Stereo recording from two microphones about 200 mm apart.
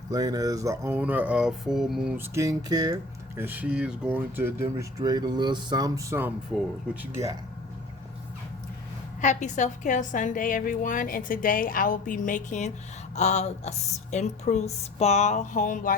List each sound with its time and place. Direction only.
0.1 s speech: 20° right (ahead or behind)
9.2 s a woman's voice: 35° left (ahead or behind)